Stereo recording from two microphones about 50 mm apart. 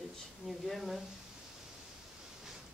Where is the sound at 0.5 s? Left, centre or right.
Centre.